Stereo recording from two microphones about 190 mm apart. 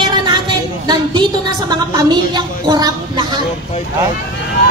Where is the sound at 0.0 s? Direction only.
25° right (ahead or behind).